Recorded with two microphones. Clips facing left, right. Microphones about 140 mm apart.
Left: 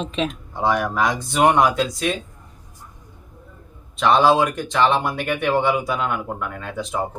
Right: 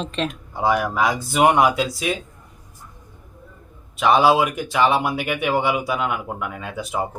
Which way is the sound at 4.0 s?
5° right (ahead or behind).